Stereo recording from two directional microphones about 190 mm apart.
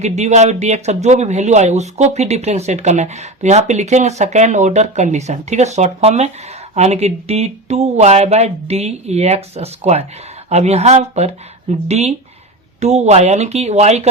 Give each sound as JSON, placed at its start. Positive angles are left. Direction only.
{"t": 0.0, "sound": "speech", "side_deg": -35}